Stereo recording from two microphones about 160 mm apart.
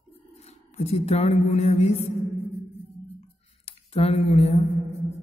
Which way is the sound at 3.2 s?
40° left (ahead or behind).